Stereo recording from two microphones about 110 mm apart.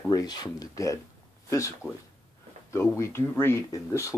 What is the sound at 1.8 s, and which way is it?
Speech, 20° right (ahead or behind).